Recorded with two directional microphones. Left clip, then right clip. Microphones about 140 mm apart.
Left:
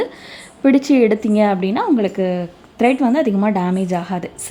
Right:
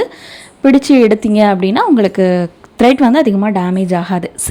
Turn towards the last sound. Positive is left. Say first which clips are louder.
# right 6 dB
turn(degrees=-30)  # may be behind; listen again after turning